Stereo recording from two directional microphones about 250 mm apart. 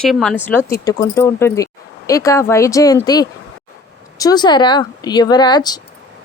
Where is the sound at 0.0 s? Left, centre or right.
Centre.